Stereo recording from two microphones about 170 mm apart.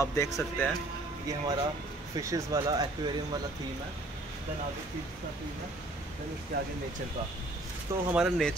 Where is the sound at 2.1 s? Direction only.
20° right (ahead or behind).